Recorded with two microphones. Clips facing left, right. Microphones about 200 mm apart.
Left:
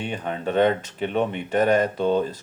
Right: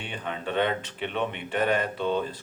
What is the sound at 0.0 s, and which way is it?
Speech, 45° left (ahead or behind).